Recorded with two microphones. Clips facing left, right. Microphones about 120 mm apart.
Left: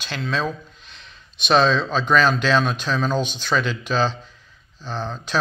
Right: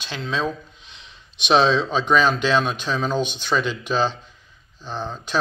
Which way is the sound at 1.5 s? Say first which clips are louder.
Even; 15° right (ahead or behind).